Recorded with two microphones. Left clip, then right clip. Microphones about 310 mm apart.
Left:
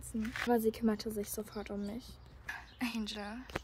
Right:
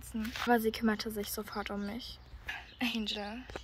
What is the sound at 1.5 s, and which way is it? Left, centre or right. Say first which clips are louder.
Speech: right 4 dB; right.